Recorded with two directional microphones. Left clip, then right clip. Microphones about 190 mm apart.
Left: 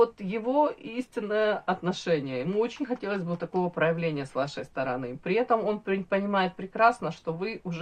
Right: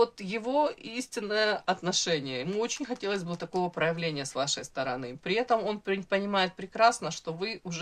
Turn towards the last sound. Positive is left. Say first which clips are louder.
# left 2 dB
turn(degrees=-20)  # may be behind; listen again after turning